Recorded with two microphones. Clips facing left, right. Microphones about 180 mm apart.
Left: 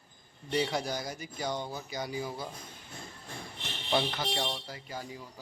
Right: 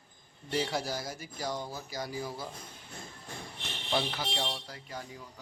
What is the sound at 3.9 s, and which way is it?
A man's voice, 5° right (ahead or behind).